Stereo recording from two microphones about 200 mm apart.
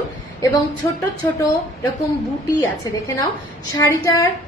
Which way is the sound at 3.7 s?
15° left (ahead or behind).